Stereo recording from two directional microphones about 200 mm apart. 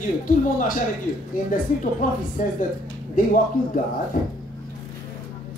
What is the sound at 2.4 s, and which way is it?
A man's voice, 40° left (ahead or behind).